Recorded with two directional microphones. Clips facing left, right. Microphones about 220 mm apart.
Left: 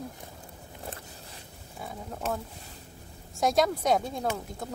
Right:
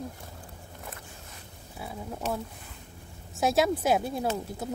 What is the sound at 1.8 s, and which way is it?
Speech, 5° right (ahead or behind).